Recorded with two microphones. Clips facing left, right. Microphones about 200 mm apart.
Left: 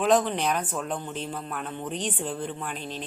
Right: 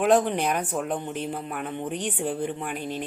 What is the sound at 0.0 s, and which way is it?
Speech, 10° right (ahead or behind).